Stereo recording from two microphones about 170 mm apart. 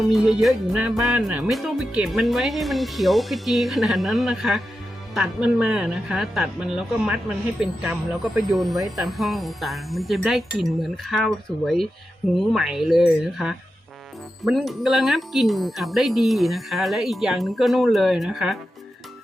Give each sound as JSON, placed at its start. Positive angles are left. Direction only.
{"t": 0.1, "sound": "music", "side_deg": -5}